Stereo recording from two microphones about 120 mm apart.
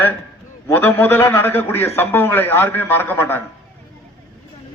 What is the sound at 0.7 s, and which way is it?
A man's voice, 15° left (ahead or behind).